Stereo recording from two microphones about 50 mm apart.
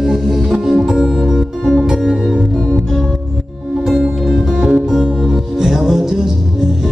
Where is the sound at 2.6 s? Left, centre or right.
Centre.